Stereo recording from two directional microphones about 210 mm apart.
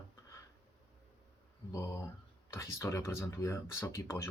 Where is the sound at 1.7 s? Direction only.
15° left (ahead or behind).